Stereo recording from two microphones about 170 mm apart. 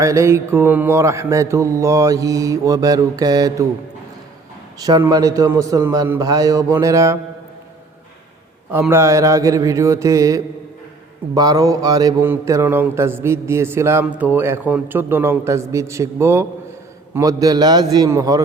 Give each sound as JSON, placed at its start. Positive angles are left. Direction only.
{"t": 0.0, "sound": "a man's voice", "side_deg": -15}
{"t": 4.8, "sound": "a man's voice", "side_deg": -20}
{"t": 8.7, "sound": "a man's voice", "side_deg": -15}